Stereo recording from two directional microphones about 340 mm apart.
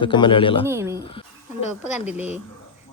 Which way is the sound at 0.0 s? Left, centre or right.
Centre.